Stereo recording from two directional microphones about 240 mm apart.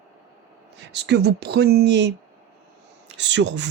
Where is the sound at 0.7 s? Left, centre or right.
Right.